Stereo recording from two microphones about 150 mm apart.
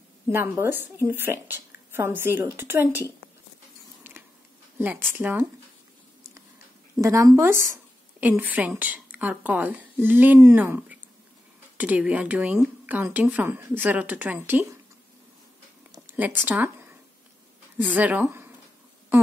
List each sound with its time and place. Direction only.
0.3 s a woman's voice: 15° right (ahead or behind)
4.7 s a woman's voice: 15° right (ahead or behind)
7.0 s a woman's voice: 20° right (ahead or behind)
15.9 s a sound: 15° right (ahead or behind)
17.7 s speech: 10° right (ahead or behind)